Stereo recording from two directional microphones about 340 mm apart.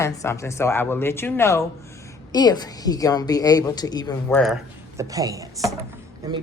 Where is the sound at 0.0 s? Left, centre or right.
Centre.